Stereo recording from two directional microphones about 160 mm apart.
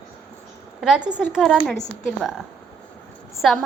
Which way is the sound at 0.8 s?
5° right (ahead or behind).